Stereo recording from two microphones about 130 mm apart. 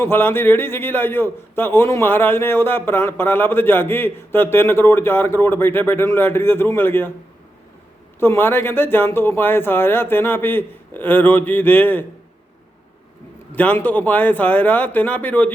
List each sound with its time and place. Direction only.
0.0 s a man's voice: 15° left (ahead or behind)
8.2 s a man's voice: 15° left (ahead or behind)
13.5 s a man's voice: 15° left (ahead or behind)